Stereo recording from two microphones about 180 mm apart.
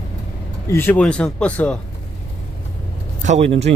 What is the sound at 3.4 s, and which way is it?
Speech, 85° right.